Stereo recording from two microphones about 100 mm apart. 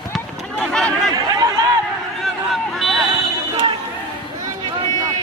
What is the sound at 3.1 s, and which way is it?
Fire alarm, 55° right (ahead or behind).